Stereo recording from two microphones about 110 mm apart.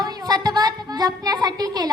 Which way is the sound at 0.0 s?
40° right (ahead or behind).